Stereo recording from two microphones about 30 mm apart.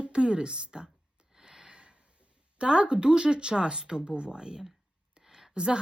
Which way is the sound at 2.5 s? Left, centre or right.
Right.